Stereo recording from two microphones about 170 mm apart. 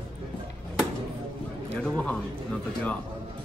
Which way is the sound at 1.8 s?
5° left (ahead or behind).